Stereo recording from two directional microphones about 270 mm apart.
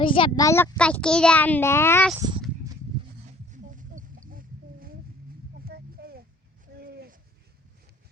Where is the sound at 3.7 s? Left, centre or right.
Right.